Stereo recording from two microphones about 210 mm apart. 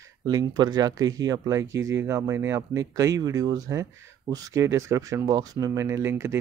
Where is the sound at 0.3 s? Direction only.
20° right (ahead or behind).